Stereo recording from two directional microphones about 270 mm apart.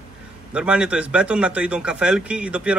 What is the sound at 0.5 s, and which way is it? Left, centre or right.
A man's voice, centre.